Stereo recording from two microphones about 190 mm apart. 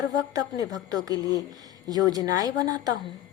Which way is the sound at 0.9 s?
20° right (ahead or behind).